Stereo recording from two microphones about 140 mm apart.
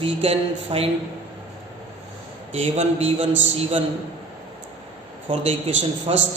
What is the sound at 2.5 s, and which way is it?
A man's voice, 50° right (ahead or behind).